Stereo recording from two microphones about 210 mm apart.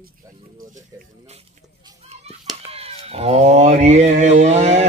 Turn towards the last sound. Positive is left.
turn(degrees=-30)  # may be behind; listen again after turning